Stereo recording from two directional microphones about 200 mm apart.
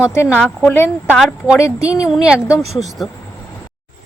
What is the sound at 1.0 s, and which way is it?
Speech, 5° right (ahead or behind).